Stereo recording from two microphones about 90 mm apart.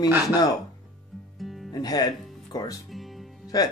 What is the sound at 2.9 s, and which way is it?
Music, centre (ahead or behind).